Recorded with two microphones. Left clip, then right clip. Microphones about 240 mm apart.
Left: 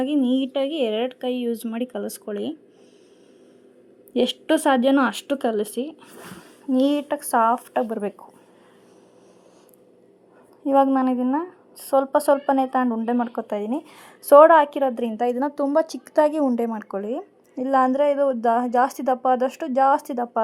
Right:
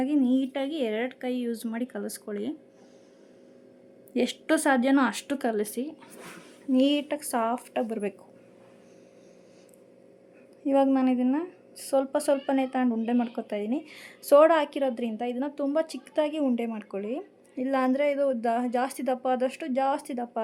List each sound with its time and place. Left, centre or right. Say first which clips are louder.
0.2 s a woman's voice: left 5 dB; centre
4.1 s a woman's voice: left 5 dB; centre
10.7 s a woman's voice: left 5 dB; centre
15.5 s a woman's voice: left 7 dB; centre
16.5 s a woman's voice: left 6 dB; centre